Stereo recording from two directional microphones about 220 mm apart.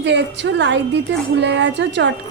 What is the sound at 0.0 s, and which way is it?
A woman's voice, 55° right (ahead or behind).